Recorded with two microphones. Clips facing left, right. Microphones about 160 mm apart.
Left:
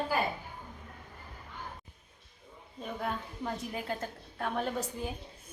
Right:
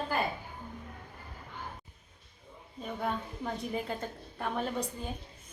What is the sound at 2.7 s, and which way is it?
A woman's voice, centre (ahead or behind).